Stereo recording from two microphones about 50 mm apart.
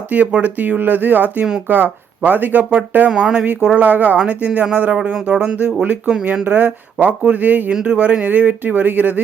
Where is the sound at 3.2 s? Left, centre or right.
Centre.